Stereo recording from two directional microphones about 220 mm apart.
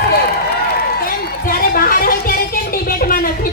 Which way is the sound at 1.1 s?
40° left (ahead or behind).